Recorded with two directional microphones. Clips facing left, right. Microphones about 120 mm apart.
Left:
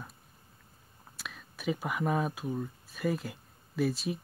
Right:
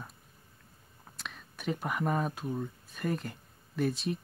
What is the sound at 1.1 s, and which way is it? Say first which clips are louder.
Speech: even; 5° left (ahead or behind).